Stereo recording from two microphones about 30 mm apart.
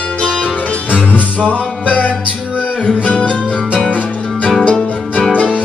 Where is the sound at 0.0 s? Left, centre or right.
Left.